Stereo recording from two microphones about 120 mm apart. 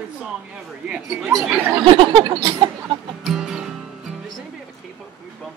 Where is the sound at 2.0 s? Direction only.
45° right (ahead or behind).